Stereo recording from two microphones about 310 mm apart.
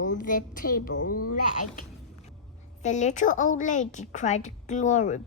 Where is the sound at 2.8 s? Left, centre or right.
Left.